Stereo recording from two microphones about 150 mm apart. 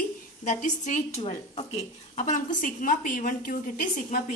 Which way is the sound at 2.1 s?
55° left (ahead or behind).